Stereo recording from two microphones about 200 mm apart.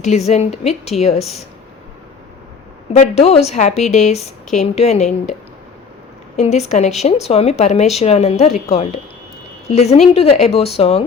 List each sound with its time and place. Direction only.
0.0 s a woman's voice: 35° left (ahead or behind)
2.9 s a woman's voice: 35° left (ahead or behind)
6.3 s a woman's voice: 35° left (ahead or behind)